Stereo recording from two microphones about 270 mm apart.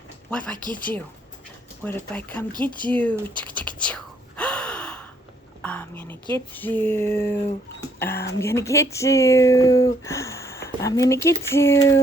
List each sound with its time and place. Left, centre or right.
0.3 s speech: centre
0.5 s speech: centre
1.8 s speech: centre
3.7 s gasp: centre
5.6 s whispering: centre
6.3 s speech: centre